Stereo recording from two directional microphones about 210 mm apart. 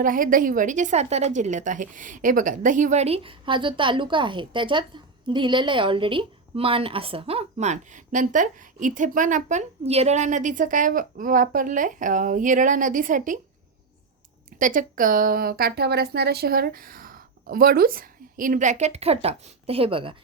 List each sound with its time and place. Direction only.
0.0 s a woman's voice: 40° right (ahead or behind)
14.6 s a woman's voice: 40° right (ahead or behind); by 20.1 s 25° right (ahead or behind)